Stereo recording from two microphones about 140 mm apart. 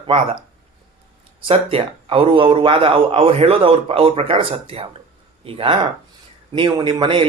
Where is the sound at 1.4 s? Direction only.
40° right (ahead or behind).